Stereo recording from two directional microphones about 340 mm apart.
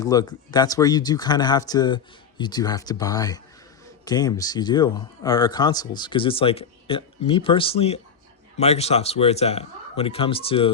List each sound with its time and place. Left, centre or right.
0.0 s speech: centre